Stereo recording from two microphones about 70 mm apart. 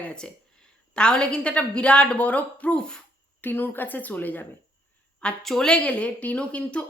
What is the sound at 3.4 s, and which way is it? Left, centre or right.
A woman's voice, left.